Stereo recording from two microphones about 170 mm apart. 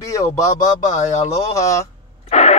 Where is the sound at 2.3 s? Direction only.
40° left (ahead or behind).